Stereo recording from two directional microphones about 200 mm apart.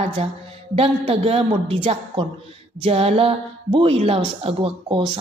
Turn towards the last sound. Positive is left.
turn(degrees=-25)  # may be behind; listen again after turning